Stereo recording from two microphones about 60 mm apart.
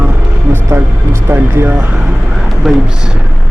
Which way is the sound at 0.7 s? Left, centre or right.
Right.